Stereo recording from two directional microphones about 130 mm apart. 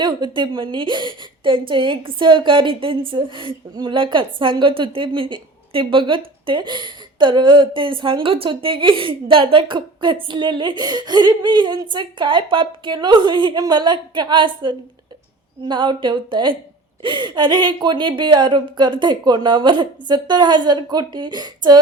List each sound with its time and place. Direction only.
0.0 s a woman's voice: 35° right (ahead or behind)